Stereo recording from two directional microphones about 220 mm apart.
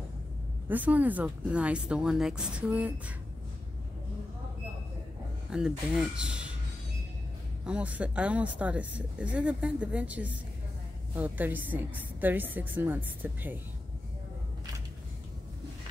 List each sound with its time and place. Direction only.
0.7 s speech: 5° right (ahead or behind)
5.5 s speech: 5° right (ahead or behind)
7.6 s a woman's voice: 5° right (ahead or behind)